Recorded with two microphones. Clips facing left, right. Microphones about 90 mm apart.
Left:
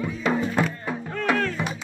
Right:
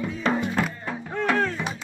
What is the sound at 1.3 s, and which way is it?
Music, 15° right (ahead or behind).